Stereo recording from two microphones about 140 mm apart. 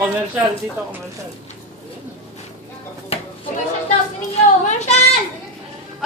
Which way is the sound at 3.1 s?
45° left (ahead or behind).